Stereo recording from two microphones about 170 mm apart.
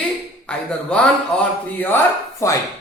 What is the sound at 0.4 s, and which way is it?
Speech, 5° left (ahead or behind).